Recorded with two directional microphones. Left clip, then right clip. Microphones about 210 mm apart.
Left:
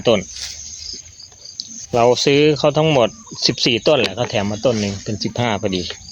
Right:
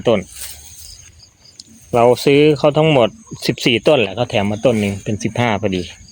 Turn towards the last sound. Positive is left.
turn(degrees=-20)  # may be behind; listen again after turning